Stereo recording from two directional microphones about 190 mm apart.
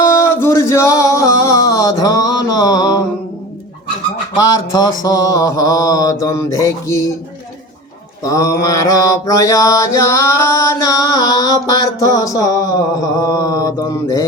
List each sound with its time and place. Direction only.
0.2 s a sound: 15° left (ahead or behind)
4.4 s mantra: 20° left (ahead or behind)
8.2 s mantra: 15° left (ahead or behind)